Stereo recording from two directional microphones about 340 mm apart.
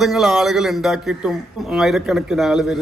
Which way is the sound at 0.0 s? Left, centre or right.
Centre.